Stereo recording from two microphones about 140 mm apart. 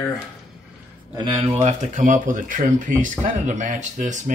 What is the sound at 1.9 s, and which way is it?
Speech, 65° right (ahead or behind).